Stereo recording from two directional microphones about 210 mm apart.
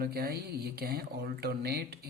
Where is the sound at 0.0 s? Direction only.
45° right (ahead or behind).